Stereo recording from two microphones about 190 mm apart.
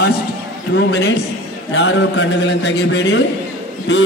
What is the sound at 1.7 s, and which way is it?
A man's voice, 70° left (ahead or behind).